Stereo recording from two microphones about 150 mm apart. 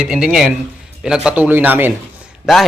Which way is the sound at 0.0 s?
5° right (ahead or behind).